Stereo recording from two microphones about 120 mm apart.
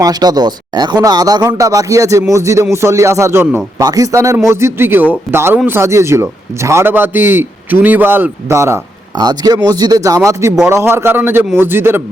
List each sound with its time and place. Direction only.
0.0 s a man's voice: 35° right (ahead or behind)
9.1 s speech: 35° right (ahead or behind); by 12.0 s 20° right (ahead or behind)